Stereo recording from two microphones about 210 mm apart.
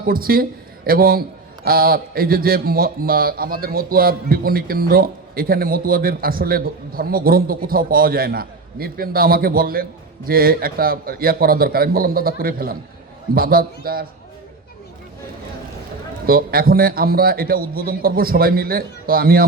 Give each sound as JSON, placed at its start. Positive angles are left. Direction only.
{"t": 0.1, "sound": "speech", "side_deg": -45}
{"t": 16.2, "sound": "speech", "side_deg": -45}